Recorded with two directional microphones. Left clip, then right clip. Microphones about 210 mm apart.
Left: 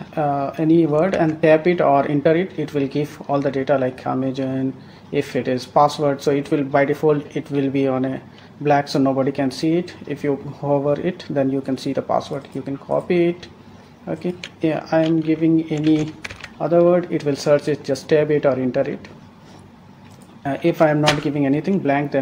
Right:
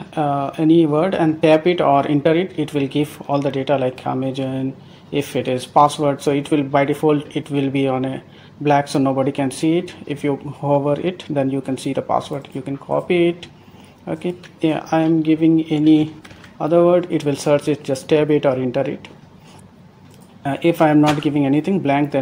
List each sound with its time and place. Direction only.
0.1 s speech: 30° right (ahead or behind)
20.4 s speech: 25° right (ahead or behind)